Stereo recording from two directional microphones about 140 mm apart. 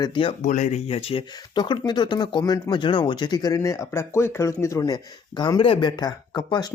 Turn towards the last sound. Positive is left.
turn(degrees=30)  # may be behind; listen again after turning